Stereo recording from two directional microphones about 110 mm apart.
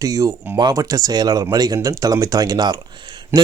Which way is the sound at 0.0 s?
30° right (ahead or behind).